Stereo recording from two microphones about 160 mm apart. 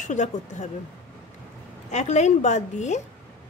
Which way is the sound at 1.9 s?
45° left (ahead or behind).